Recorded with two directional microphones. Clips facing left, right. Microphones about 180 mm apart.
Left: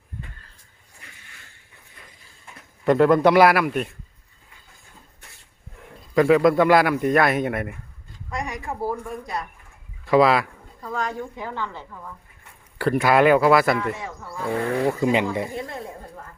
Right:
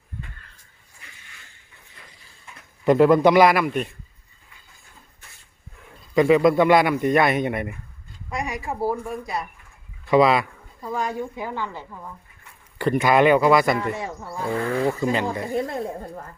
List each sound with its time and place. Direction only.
2.8 s speech: 5° right (ahead or behind)
6.1 s a woman's voice: centre (ahead or behind); by 12.1 s 15° right (ahead or behind)
12.8 s speech: 5° left (ahead or behind)
14.0 s speech: 25° right (ahead or behind)
14.4 s speech: 10° left (ahead or behind)
15.5 s speech: 45° right (ahead or behind)